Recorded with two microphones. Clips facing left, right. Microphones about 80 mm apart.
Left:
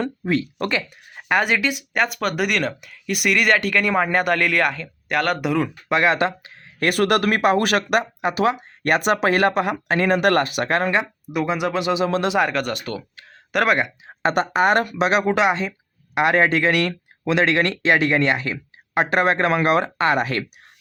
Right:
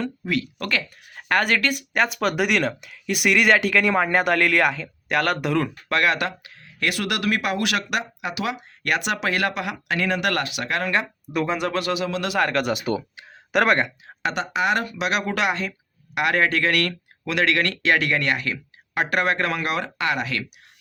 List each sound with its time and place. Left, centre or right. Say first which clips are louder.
0.0 s speech: left 3 dB; left
1.1 s speech: left 1 dB; centre
1.9 s speech: right 1 dB; centre
5.9 s speech: left 4 dB; left
11.3 s speech: left 1 dB; centre
12.0 s speech: left 5 dB; left
12.4 s speech: right 2 dB; centre
12.6 s speech: right 3 dB; centre
13.5 s speech: even; centre
14.2 s speech: left 5 dB; left